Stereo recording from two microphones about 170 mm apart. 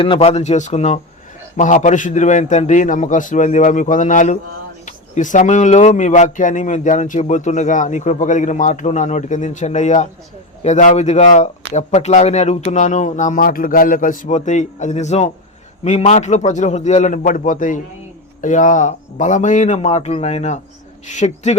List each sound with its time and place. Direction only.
0.0 s speech: 35° left (ahead or behind)